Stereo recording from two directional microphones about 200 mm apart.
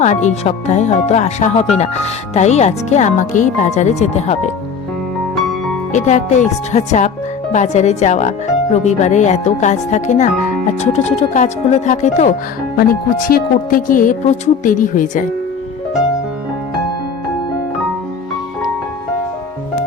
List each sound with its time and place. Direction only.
0.0 s speech: 35° left (ahead or behind)
5.4 s music: centre (ahead or behind)
5.9 s speech: 35° left (ahead or behind)